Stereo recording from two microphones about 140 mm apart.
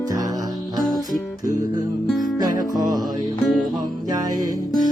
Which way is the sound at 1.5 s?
20° right (ahead or behind).